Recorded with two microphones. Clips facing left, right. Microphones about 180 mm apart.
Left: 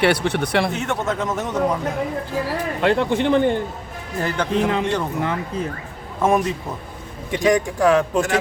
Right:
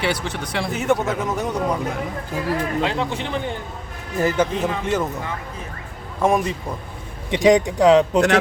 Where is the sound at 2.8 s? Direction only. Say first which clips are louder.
Left 5 dB; 55° left (ahead or behind).